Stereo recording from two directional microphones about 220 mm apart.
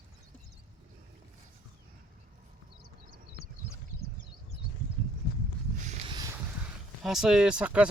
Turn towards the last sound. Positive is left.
turn(degrees=-5)  # may be behind; listen again after turning